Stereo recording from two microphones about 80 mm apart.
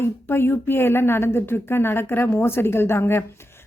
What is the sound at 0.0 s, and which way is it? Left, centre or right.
A woman's voice, left.